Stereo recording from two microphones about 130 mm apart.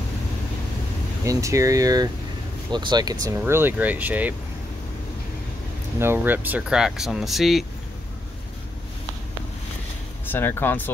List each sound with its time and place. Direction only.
1.2 s speech: 25° right (ahead or behind)
3.4 s speech: 15° right (ahead or behind)
5.9 s speech: 15° right (ahead or behind); by 7.6 s centre (ahead or behind)
10.2 s speech: 15° left (ahead or behind)